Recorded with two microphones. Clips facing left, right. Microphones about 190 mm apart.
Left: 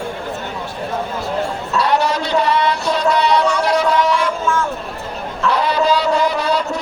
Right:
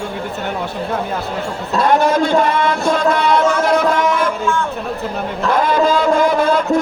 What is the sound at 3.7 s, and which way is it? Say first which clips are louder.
Music: right 1 dB; 50° right (ahead or behind).